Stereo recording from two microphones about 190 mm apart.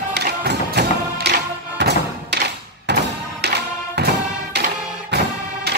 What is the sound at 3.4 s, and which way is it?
Music, 60° right (ahead or behind).